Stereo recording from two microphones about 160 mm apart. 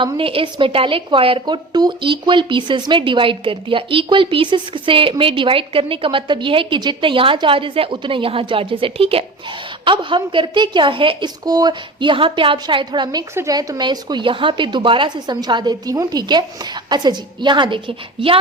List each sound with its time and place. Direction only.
0.0 s a woman's voice: 35° right (ahead or behind)